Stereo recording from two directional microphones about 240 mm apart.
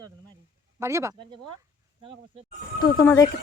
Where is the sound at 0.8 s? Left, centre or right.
Centre.